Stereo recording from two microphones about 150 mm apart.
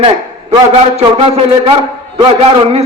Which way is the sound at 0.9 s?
40° right (ahead or behind).